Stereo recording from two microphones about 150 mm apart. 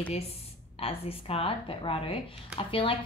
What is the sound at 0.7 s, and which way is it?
Speech, 40° left (ahead or behind).